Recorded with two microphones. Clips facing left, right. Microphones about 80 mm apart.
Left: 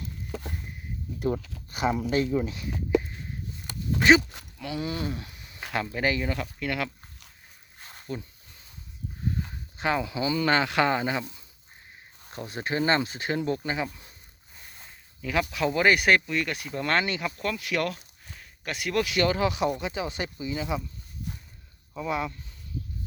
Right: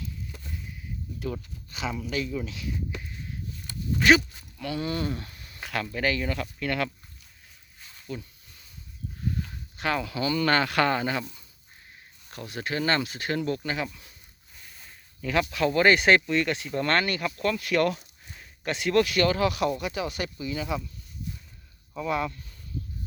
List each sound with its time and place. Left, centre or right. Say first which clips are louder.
0.3 s a sound: left 8 dB; left
0.5 s a sound: left 1 dB; left
1.4 s speech: left 1 dB; left
1.7 s speech: left 6 dB; left
4.5 s speech: right 2 dB; centre
7.8 s a sound: left 2 dB; left
9.4 s speech: left 1 dB; left
15.2 s speech: right 1 dB; centre
17.0 s speech: right 1 dB; centre
17.2 s speech: right 3 dB; centre
17.8 s a sound: right 5 dB; centre
19.1 s speech: right 1 dB; centre
21.9 s speech: right 1 dB; centre